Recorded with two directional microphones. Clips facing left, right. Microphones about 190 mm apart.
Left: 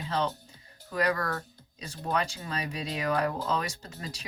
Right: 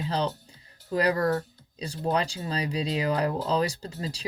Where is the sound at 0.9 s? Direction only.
30° right (ahead or behind).